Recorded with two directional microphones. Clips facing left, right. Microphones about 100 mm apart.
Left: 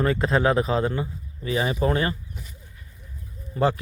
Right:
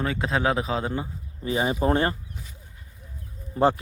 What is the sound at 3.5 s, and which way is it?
Speech, 30° right (ahead or behind).